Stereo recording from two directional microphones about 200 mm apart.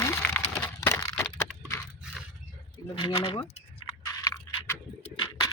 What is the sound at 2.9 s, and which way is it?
Speech, 25° left (ahead or behind).